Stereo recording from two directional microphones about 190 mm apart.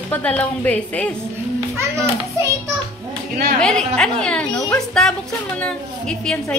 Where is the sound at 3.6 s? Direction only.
5° left (ahead or behind).